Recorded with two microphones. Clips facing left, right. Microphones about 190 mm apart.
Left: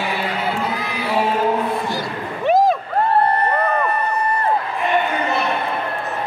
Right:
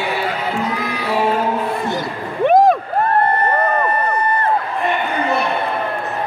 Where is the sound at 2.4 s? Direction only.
55° right (ahead or behind).